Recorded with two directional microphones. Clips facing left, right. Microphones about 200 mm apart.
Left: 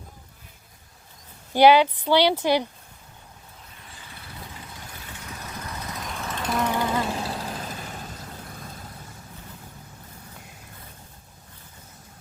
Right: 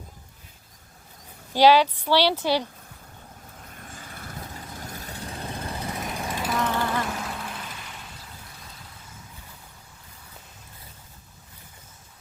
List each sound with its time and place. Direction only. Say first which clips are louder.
1.5 s speech: left 1 dB; 15° left (ahead or behind)
3.8 s vehicle: right 5 dB; 45° right (ahead or behind)
5.0 s vehicle: right 4 dB; 35° right (ahead or behind)
6.1 s vehicle: left 1 dB; 15° right (ahead or behind)
6.6 s vehicle: left 3 dB; 15° left (ahead or behind)
7.1 s vehicle: left 3 dB; 30° left (ahead or behind)